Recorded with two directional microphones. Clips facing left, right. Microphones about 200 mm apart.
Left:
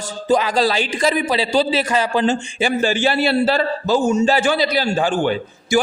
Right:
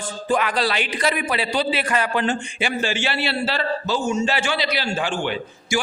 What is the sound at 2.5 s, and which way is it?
A man's voice, 40° left (ahead or behind).